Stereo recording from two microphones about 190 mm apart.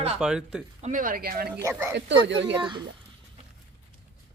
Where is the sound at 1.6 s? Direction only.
10° right (ahead or behind).